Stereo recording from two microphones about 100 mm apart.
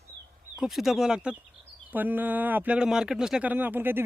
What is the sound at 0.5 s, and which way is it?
Speech, 5° right (ahead or behind).